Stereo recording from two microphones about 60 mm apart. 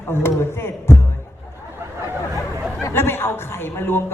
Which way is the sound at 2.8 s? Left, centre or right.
Left.